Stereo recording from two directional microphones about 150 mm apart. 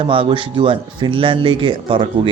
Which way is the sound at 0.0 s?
35° right (ahead or behind).